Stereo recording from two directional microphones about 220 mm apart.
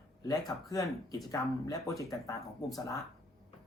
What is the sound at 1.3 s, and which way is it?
Speech, 15° left (ahead or behind).